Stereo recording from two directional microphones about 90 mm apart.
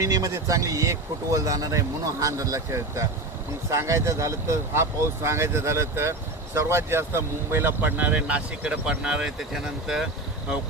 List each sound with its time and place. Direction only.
0.0 s speech: 35° right (ahead or behind); by 10.1 s 5° right (ahead or behind)